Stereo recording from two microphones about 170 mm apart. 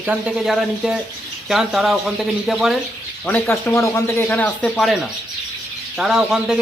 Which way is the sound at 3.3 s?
10° left (ahead or behind).